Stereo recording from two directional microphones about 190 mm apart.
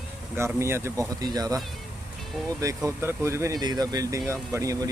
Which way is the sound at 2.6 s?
15° right (ahead or behind).